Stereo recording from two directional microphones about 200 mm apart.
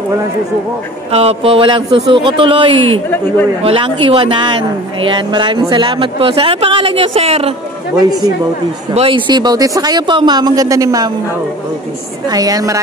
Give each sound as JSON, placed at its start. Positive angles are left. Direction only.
{"t": 1.1, "sound": "a woman's voice", "side_deg": -30}
{"t": 8.9, "sound": "a woman's voice", "side_deg": -25}
{"t": 12.3, "sound": "a woman's voice", "side_deg": -20}